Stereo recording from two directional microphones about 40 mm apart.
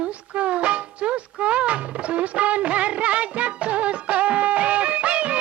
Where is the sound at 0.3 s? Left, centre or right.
Right.